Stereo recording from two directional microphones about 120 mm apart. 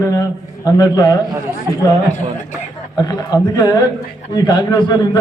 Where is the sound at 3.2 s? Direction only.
35° left (ahead or behind).